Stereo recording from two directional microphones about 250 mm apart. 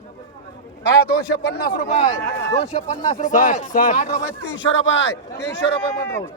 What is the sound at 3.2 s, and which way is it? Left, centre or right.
Speech, left.